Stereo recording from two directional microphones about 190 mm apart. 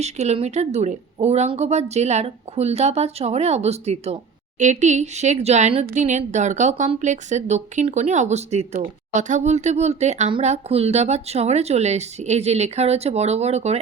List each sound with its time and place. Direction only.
0.0 s speech: 35° right (ahead or behind)